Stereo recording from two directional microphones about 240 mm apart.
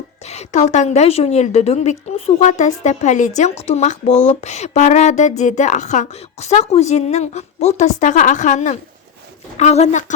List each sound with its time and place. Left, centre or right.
0.3 s speech: left